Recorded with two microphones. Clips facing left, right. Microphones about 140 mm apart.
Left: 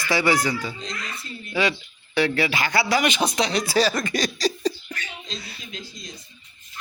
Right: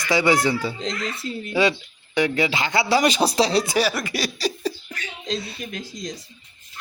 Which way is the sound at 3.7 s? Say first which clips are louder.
Left 1 dB; 10° right (ahead or behind).